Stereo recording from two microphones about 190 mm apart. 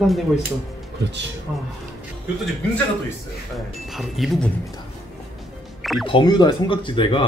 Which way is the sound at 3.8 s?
Centre (ahead or behind).